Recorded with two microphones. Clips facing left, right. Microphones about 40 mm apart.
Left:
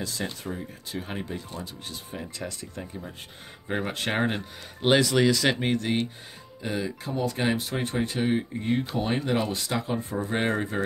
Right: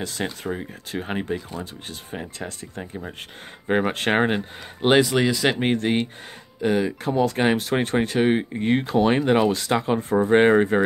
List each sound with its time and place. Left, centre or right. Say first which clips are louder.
0.0 s speech: right 4 dB; right
1.6 s speech: right 3 dB; right
4.8 s speech: right 3 dB; centre
5.6 s speech: right 4 dB; right
7.5 s speech: right 7 dB; right